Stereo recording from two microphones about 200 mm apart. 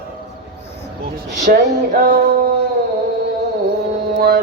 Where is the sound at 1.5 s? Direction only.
50° right (ahead or behind).